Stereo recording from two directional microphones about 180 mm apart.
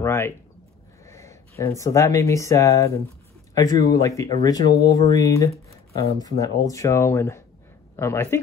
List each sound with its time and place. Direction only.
0.0 s speech: 15° left (ahead or behind)